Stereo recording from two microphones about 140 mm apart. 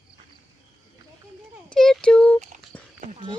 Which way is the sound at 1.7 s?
5° left (ahead or behind).